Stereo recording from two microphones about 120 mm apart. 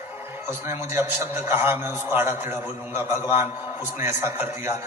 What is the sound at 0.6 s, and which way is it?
A man's voice, 20° right (ahead or behind).